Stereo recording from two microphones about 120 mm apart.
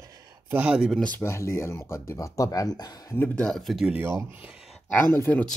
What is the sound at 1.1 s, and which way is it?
Speech, 20° left (ahead or behind).